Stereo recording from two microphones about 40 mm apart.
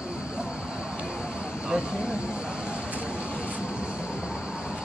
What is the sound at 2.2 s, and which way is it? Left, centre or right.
Vehicle, centre.